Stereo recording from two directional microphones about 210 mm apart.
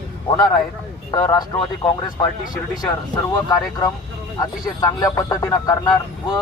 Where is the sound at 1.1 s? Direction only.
15° left (ahead or behind).